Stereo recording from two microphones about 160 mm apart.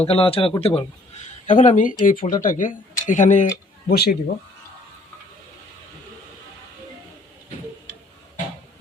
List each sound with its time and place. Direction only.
0.0 s speech: 35° left (ahead or behind)
1.5 s speech: 50° left (ahead or behind)
3.8 s speech: 75° left (ahead or behind)